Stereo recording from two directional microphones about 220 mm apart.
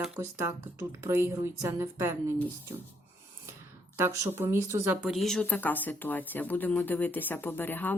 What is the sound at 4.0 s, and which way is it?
Speech, 10° right (ahead or behind).